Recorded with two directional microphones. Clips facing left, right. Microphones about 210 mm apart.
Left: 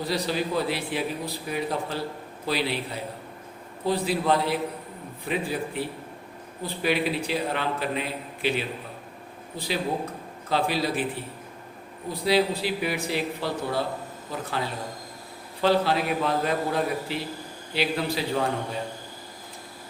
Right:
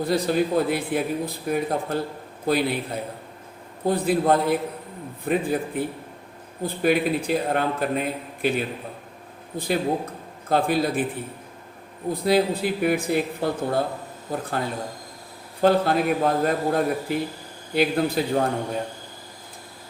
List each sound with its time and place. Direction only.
0.0 s a man's voice: 50° right (ahead or behind)
12.2 s a man's voice: 50° right (ahead or behind)